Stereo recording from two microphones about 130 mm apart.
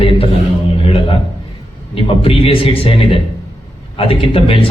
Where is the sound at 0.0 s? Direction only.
45° left (ahead or behind).